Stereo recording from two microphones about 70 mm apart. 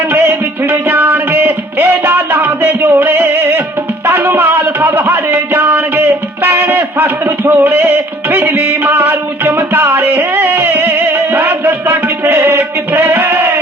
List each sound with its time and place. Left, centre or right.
0.1 s music: right